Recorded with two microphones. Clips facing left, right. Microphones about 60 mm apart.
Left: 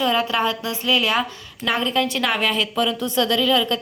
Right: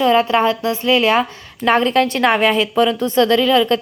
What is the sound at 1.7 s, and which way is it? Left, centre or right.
A woman's voice, right.